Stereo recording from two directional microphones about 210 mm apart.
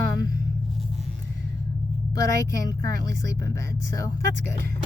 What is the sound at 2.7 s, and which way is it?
Speech, 15° left (ahead or behind).